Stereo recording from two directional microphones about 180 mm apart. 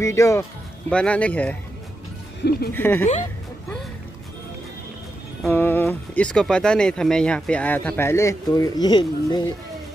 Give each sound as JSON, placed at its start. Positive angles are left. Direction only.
{"t": 0.0, "sound": "speech", "side_deg": 15}
{"t": 0.8, "sound": "speech", "side_deg": 5}
{"t": 2.7, "sound": "speech", "side_deg": 10}
{"t": 5.5, "sound": "speech", "side_deg": 10}